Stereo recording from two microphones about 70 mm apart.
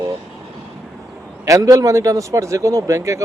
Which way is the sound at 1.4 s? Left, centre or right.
Right.